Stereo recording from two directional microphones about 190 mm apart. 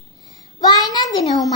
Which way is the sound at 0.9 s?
20° left (ahead or behind).